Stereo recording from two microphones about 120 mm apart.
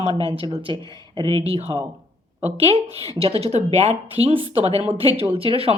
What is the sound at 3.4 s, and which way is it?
Speech, 65° right (ahead or behind).